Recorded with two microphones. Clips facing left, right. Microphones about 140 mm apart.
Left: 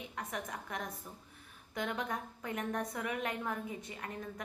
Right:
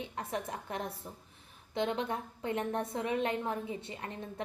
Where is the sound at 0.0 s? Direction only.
30° right (ahead or behind).